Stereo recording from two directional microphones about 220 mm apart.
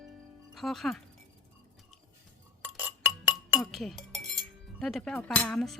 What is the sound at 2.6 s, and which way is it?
Music, 10° right (ahead or behind).